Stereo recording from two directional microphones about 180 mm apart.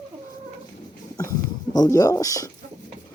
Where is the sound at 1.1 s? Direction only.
20° left (ahead or behind).